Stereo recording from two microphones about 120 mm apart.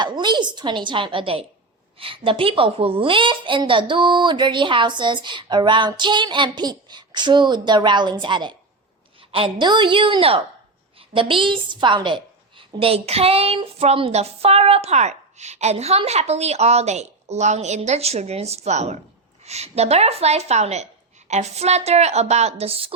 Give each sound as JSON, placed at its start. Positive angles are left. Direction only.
{"t": 0.0, "sound": "a woman's voice", "side_deg": -40}